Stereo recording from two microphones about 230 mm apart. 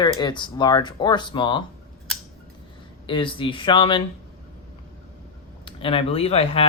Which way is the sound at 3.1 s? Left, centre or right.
Left.